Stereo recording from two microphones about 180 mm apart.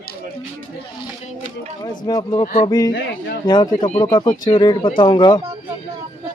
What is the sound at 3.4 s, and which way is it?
Speech, 25° left (ahead or behind).